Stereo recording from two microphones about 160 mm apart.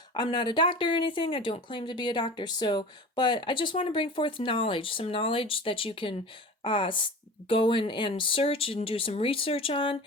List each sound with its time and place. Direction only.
0.1 s speech: 30° left (ahead or behind)